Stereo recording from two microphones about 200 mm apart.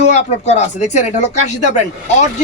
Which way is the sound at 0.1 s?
35° left (ahead or behind).